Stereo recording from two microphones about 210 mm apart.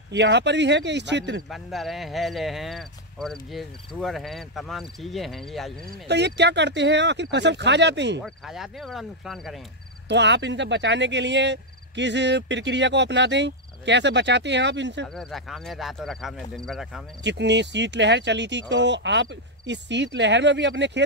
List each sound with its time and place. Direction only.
0.1 s speech: 55° right (ahead or behind)
1.5 s speech: centre (ahead or behind)
6.0 s speech: 55° right (ahead or behind)
8.2 s speech: centre (ahead or behind)
10.0 s speech: 55° right (ahead or behind)
15.1 s speech: centre (ahead or behind)
17.2 s speech: 55° right (ahead or behind)